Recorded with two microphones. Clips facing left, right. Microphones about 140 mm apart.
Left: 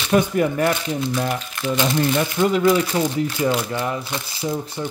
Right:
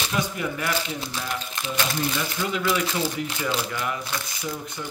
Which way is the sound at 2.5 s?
25° left (ahead or behind).